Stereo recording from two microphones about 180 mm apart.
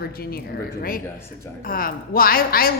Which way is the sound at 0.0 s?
60° left (ahead or behind).